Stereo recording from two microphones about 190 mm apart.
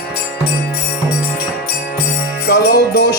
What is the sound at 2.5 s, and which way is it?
Music, 60° left (ahead or behind).